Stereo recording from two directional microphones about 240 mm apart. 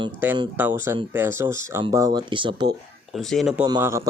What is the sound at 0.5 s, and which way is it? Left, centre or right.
Speech, centre.